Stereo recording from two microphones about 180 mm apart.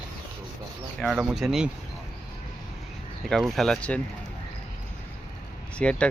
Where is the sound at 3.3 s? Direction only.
Centre (ahead or behind).